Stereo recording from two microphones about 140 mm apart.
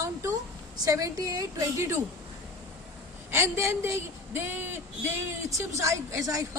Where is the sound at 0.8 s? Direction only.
25° right (ahead or behind).